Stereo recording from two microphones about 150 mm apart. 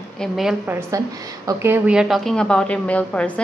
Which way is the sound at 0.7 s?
15° right (ahead or behind).